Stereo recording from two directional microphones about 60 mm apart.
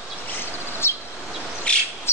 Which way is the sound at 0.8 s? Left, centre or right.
Left.